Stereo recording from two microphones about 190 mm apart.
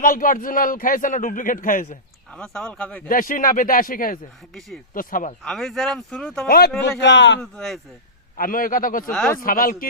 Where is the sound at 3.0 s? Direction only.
45° left (ahead or behind).